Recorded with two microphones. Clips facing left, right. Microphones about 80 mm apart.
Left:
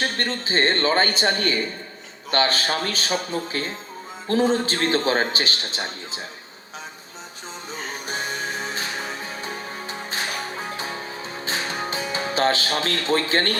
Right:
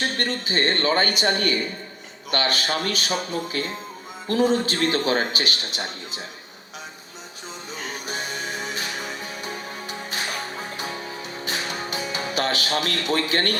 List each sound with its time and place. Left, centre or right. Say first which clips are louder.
0.2 s a man's voice: left 1 dB; left
2.3 s a man's voice: left 2 dB; left
8.0 s music: left 3 dB; left